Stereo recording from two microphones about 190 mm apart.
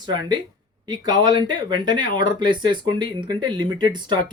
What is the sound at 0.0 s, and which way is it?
Speech, 25° right (ahead or behind).